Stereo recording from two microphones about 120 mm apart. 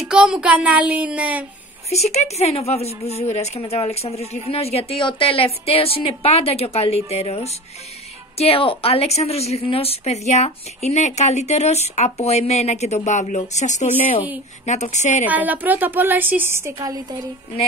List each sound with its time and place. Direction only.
0.1 s a woman's voice: 5° right (ahead or behind)
1.9 s speech: 65° left (ahead or behind); by 13.4 s 85° left
13.4 s speech: 75° left (ahead or behind)
15.2 s a woman's voice: 15° right (ahead or behind); by 17.2 s 30° right (ahead or behind)